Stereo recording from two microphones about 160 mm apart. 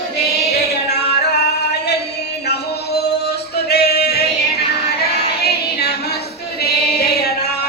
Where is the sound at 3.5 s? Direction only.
90° left.